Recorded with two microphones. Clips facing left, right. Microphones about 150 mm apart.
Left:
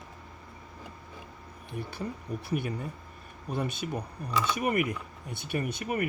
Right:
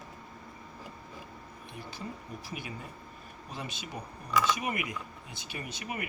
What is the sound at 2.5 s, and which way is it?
Speech, 55° left (ahead or behind).